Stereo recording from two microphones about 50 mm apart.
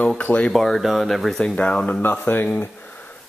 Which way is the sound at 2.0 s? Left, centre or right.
Left.